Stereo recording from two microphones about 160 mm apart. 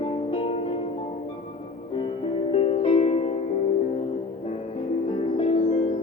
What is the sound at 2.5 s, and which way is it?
Music, 40° left (ahead or behind).